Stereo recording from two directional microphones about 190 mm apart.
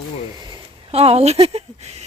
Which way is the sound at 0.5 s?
30° right (ahead or behind).